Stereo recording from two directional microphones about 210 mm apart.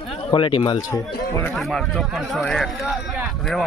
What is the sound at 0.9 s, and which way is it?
Speech, 15° left (ahead or behind).